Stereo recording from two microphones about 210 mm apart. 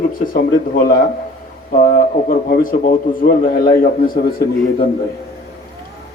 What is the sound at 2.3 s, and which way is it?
A man's voice, 40° left (ahead or behind).